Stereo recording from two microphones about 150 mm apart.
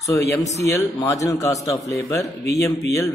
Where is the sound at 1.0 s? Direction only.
20° left (ahead or behind).